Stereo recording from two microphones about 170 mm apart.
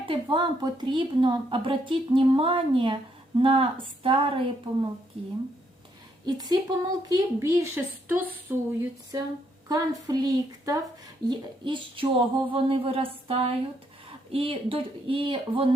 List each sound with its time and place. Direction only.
0.0 s a woman's voice: 30° right (ahead or behind)
6.2 s a woman's voice: 25° right (ahead or behind)